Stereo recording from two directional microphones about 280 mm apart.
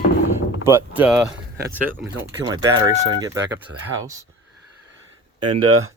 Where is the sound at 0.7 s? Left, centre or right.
Centre.